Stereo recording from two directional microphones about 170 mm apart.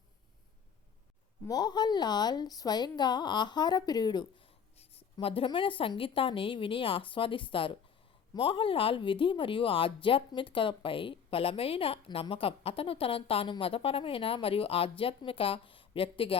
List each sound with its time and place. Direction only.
1.5 s speech: 25° left (ahead or behind)